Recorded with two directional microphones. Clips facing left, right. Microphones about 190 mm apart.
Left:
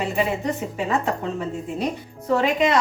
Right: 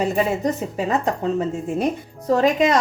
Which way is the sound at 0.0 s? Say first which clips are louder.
Right 3 dB; 40° right (ahead or behind).